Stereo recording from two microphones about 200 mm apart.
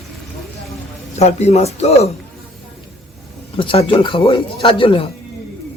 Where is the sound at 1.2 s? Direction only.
35° left (ahead or behind).